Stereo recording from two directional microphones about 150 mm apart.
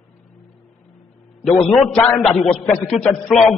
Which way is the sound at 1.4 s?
Centre (ahead or behind).